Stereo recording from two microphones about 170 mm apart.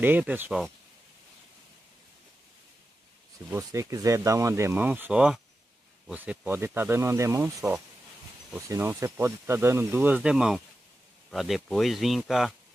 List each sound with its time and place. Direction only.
0.0 s speech: 10° right (ahead or behind)
3.4 s speech: 15° right (ahead or behind); by 12.5 s centre (ahead or behind)